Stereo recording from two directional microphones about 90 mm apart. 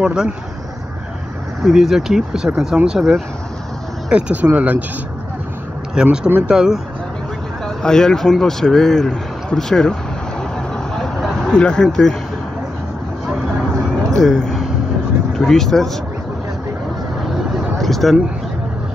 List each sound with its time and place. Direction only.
0.0 s speech: 10° right (ahead or behind)
1.6 s speech: 5° right (ahead or behind)
6.0 s speech: 5° right (ahead or behind)
7.6 s speech: 5° left (ahead or behind)
11.0 s a sound: 5° left (ahead or behind)
14.1 s speech: 10° left (ahead or behind)
17.7 s a sound: centre (ahead or behind)